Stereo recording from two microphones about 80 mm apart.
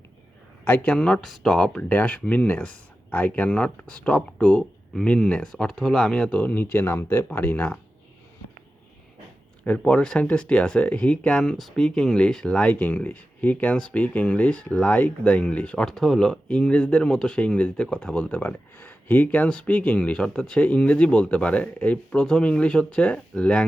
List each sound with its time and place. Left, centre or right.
0.6 s speech: left
0.9 s speech: centre
9.6 s speech: centre